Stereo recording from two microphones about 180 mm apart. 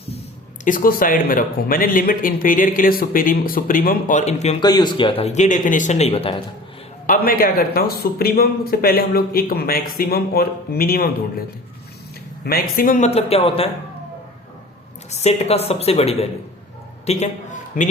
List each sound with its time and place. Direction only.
0.6 s speech: 50° left (ahead or behind)
4.6 s speech: 25° left (ahead or behind)
7.1 s speech: 50° left (ahead or behind)
12.5 s speech: 55° left (ahead or behind)
13.1 s speech: 35° left (ahead or behind)
15.1 s speech: 35° left (ahead or behind)
17.1 s a sound: 40° left (ahead or behind)